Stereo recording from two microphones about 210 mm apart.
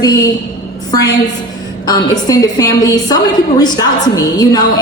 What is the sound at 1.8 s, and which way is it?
A woman's voice, 15° left (ahead or behind).